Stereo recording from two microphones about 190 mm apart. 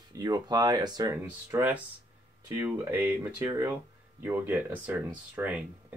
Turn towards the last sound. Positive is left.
turn(degrees=-10)  # may be behind; listen again after turning